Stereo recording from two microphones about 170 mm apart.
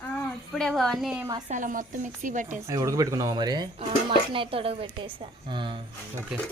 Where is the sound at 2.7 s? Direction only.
20° right (ahead or behind).